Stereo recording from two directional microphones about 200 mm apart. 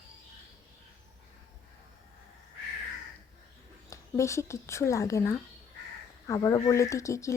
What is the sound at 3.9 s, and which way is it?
Speech, 15° left (ahead or behind).